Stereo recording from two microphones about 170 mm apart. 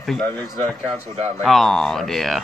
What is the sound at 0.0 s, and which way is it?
Speech, centre (ahead or behind).